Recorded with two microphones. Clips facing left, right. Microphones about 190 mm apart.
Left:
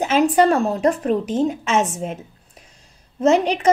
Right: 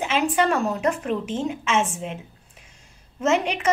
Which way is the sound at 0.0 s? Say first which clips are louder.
Left 6 dB; 40° left (ahead or behind).